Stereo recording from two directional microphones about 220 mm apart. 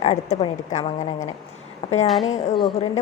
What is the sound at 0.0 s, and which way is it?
A woman's voice, 30° left (ahead or behind).